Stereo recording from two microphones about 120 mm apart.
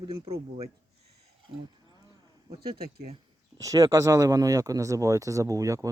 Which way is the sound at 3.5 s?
30° right (ahead or behind).